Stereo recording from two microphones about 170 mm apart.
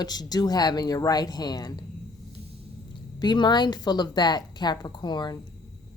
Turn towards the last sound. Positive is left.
turn(degrees=25)  # may be behind; listen again after turning